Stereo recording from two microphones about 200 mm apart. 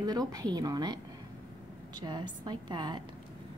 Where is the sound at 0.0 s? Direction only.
20° right (ahead or behind).